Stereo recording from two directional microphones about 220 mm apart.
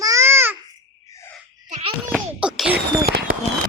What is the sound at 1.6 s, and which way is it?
Babbling, 30° right (ahead or behind).